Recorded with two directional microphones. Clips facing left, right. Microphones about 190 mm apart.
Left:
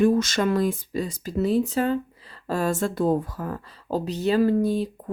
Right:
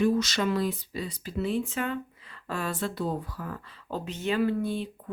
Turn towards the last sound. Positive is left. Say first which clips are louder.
# left 7 dB
turn(degrees=40)  # may be behind; listen again after turning